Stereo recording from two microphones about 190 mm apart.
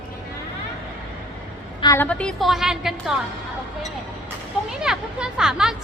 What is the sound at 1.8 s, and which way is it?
Speech, 15° left (ahead or behind).